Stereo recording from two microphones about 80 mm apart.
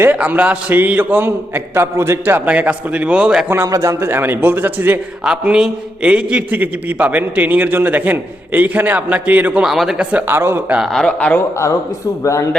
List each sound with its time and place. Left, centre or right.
0.0 s a man's voice: right
2.5 s a man's voice: centre
3.7 s a man's voice: right
4.0 s a man's voice: right
5.2 s a man's voice: centre
9.6 s speech: centre
10.2 s a man's voice: right
10.8 s speech: centre
11.0 s a man's voice: centre
12.2 s speech: left